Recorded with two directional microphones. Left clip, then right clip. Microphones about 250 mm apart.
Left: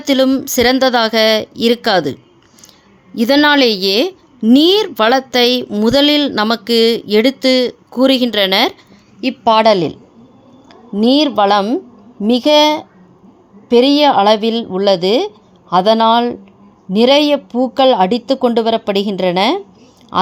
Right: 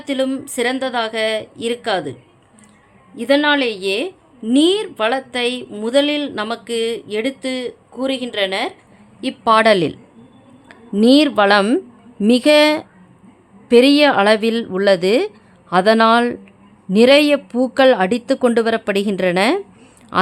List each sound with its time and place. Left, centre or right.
0.0 s a woman's voice: left
3.2 s a woman's voice: left
9.2 s a woman's voice: centre